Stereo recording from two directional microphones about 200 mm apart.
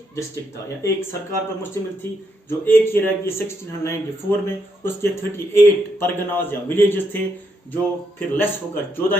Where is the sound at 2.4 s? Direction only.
10° left (ahead or behind).